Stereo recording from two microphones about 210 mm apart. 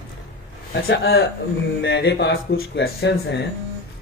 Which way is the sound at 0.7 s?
50° left (ahead or behind).